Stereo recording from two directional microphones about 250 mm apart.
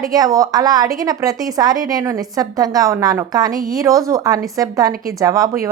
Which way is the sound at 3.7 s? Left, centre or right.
Centre.